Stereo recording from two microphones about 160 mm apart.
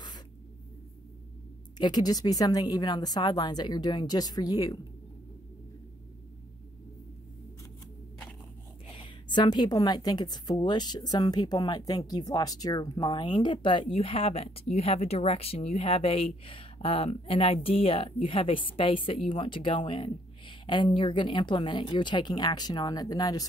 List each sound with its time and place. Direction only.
1.8 s a woman's voice: 25° left (ahead or behind)
8.9 s a woman's voice: 30° left (ahead or behind)